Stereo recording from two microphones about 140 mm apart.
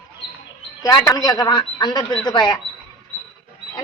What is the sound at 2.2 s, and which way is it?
Chirp, 30° left (ahead or behind).